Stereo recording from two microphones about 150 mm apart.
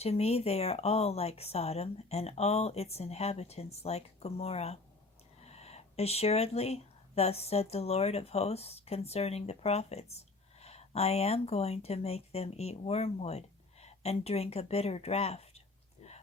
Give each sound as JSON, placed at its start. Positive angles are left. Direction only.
{"t": 0.0, "sound": "speech", "side_deg": 45}